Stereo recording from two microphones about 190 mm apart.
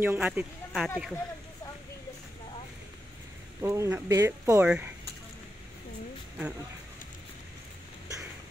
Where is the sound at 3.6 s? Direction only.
15° right (ahead or behind).